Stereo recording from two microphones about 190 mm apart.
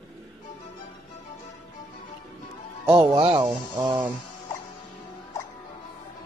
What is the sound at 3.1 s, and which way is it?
Speech, 25° right (ahead or behind).